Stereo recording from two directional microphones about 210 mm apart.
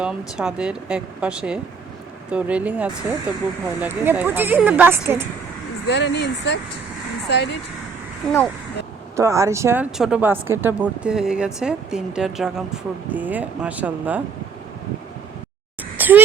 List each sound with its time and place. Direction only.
0.0 s speech: 5° right (ahead or behind)
5.9 s speech: 55° left (ahead or behind)
9.1 s speech: 15° right (ahead or behind)
16.0 s a sound: 10° right (ahead or behind)